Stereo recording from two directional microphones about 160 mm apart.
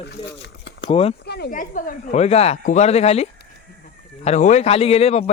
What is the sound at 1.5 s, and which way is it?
Speech, 55° left (ahead or behind).